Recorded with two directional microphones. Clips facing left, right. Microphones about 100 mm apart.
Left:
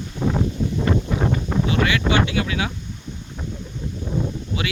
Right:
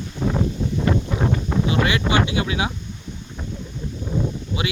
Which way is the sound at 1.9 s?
20° right (ahead or behind).